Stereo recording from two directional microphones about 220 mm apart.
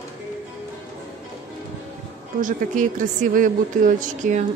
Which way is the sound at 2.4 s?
35° right (ahead or behind).